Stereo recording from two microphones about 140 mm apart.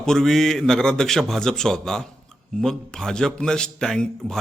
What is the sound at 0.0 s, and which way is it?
A man's voice, 5° left (ahead or behind).